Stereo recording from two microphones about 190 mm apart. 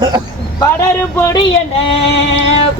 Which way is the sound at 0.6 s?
15° left (ahead or behind).